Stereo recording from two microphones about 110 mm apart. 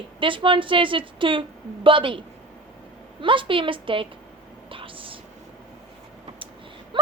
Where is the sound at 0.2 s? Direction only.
50° right (ahead or behind).